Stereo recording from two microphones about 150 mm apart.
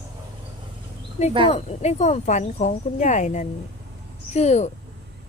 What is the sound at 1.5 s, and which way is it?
Speech, 45° left (ahead or behind).